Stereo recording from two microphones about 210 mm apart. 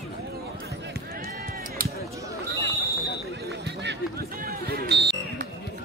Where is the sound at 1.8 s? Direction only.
45° right (ahead or behind).